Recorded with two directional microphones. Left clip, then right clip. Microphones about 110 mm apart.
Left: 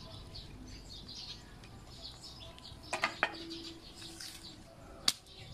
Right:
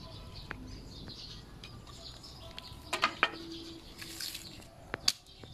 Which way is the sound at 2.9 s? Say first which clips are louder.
Right 4 dB; centre (ahead or behind).